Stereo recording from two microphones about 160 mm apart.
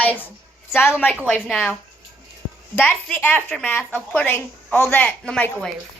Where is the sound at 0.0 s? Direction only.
10° left (ahead or behind).